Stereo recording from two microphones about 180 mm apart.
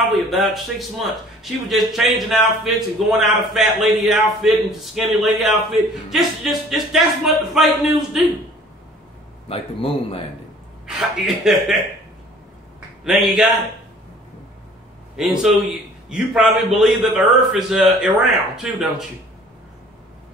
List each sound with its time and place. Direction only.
0.0 s a man's voice: centre (ahead or behind)
9.5 s a man's voice: 30° left (ahead or behind)
10.9 s a man's voice: 5° right (ahead or behind)
13.0 s a man's voice: centre (ahead or behind)
15.1 s a man's voice: centre (ahead or behind)